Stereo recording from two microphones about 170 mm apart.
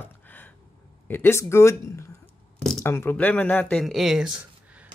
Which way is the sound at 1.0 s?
15° left (ahead or behind).